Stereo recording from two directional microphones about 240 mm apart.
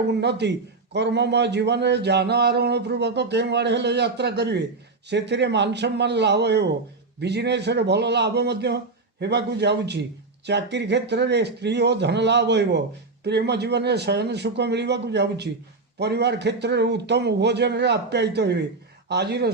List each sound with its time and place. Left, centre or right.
0.2 s speech: right